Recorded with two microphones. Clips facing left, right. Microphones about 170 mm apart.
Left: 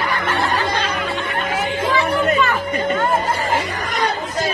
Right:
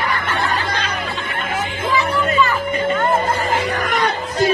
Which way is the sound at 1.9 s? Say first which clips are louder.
Even; 55° left (ahead or behind).